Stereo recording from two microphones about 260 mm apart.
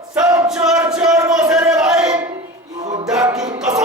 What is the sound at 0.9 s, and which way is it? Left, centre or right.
Crowd, centre.